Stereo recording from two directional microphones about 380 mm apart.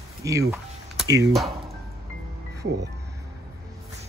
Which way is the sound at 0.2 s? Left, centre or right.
Centre.